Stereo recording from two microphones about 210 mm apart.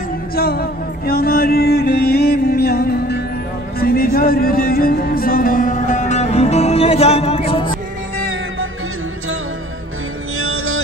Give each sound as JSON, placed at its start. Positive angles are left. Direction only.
{"t": 0.4, "sound": "a sound", "side_deg": 45}
{"t": 3.8, "sound": "music", "side_deg": 45}
{"t": 10.4, "sound": "music", "side_deg": -80}